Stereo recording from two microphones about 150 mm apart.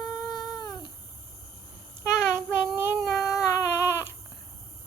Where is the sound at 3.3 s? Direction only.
20° left (ahead or behind).